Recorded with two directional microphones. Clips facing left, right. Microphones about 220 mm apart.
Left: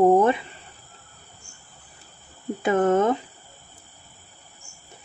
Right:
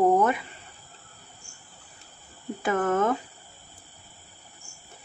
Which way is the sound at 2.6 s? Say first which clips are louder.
Left 5 dB; 20° left (ahead or behind).